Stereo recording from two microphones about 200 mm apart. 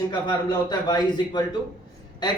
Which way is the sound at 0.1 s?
20° left (ahead or behind).